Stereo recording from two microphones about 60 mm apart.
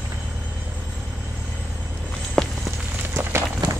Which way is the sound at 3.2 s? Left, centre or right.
Right.